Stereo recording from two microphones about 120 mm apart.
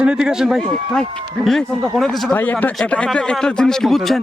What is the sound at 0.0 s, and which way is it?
Speech, 5° right (ahead or behind).